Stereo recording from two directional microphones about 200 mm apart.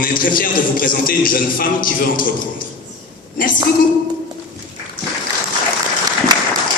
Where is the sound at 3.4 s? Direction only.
45° left (ahead or behind).